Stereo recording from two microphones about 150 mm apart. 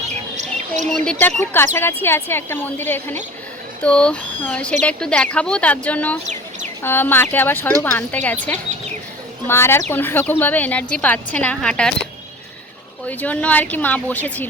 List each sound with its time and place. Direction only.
0.9 s a woman's voice: 5° left (ahead or behind)
13.1 s a woman's voice: 10° left (ahead or behind)